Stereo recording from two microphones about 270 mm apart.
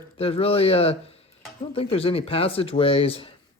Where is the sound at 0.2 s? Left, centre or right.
Left.